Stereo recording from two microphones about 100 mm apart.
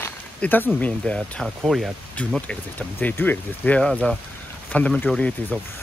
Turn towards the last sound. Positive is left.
turn(degrees=10)  # may be behind; listen again after turning